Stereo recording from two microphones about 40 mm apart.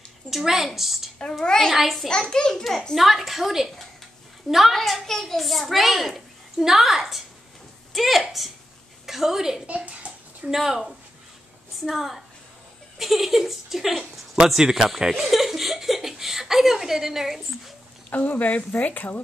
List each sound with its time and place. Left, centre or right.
0.3 s a woman's voice: centre
1.4 s a child's voice: centre
1.7 s a woman's voice: centre
2.0 s a child's voice: centre
2.9 s a woman's voice: centre
9.7 s a sound: right
10.5 s speech: centre
11.9 s a woman's voice: centre
14.6 s laughter: centre
18.1 s speech: left